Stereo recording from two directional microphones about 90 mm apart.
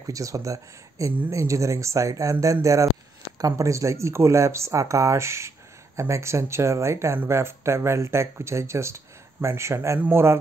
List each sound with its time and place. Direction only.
0.0 s speech: 40° right (ahead or behind)
9.9 s speech: 20° right (ahead or behind)